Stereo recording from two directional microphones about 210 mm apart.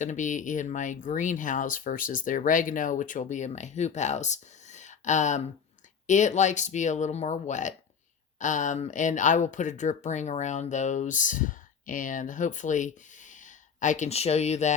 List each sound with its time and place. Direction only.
0.0 s speech: 35° left (ahead or behind)